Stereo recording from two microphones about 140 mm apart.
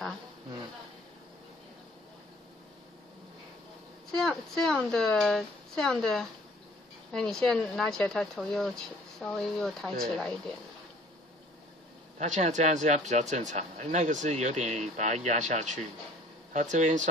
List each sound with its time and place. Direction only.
4.1 s speech: 5° left (ahead or behind)
12.2 s speech: 55° right (ahead or behind)